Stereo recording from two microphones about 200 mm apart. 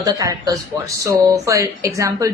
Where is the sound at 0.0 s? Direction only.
15° right (ahead or behind).